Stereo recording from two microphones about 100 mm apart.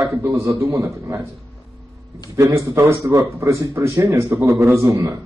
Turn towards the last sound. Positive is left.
turn(degrees=-30)  # may be behind; listen again after turning